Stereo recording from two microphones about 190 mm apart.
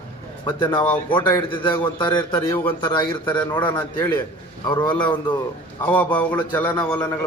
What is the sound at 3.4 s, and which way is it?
Speech, 10° left (ahead or behind).